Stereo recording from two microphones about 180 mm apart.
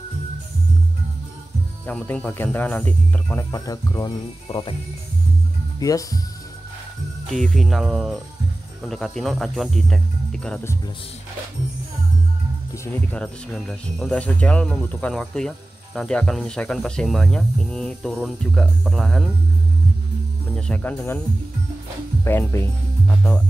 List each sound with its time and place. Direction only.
1.9 s speech: 5° left (ahead or behind)
3.5 s speech: 20° left (ahead or behind)
5.8 s speech: 20° left (ahead or behind)
7.2 s speech: centre (ahead or behind)
12.7 s speech: 15° left (ahead or behind)
13.2 s speech: centre (ahead or behind)
20.5 s speech: 5° left (ahead or behind)
22.2 s speech: 10° left (ahead or behind)
23.0 s speech: centre (ahead or behind)